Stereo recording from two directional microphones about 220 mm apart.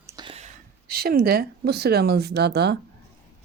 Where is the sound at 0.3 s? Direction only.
30° right (ahead or behind).